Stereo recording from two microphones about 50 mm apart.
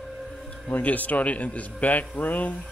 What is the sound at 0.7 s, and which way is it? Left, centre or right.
Speech, left.